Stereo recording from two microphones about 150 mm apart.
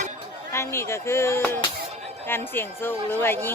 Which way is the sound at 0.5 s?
20° left (ahead or behind).